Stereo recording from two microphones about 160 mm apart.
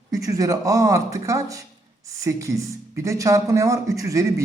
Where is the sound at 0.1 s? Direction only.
20° right (ahead or behind).